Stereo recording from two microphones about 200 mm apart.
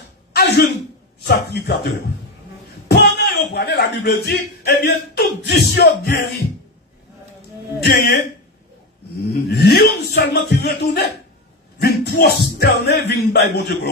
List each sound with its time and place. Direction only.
0.3 s throat clearing: 50° left (ahead or behind)
1.2 s speech: 55° left (ahead or behind)
2.9 s a sound: 55° left (ahead or behind)
3.5 s speech: 55° left (ahead or behind)
7.8 s speech: 50° left (ahead or behind)
9.3 s speech: 50° left (ahead or behind)